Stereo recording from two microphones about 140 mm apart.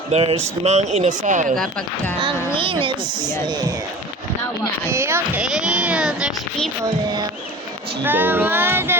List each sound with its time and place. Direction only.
0.1 s speech: 45° right (ahead or behind); by 1.5 s 65° right (ahead or behind)
2.6 s speech: 40° right (ahead or behind)
4.9 s speech: 20° right (ahead or behind)
5.4 s speech: 5° right (ahead or behind)
8.0 s music: 15° right (ahead or behind)